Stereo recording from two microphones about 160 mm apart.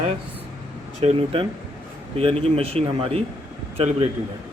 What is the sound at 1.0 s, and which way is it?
A man's voice, 40° right (ahead or behind).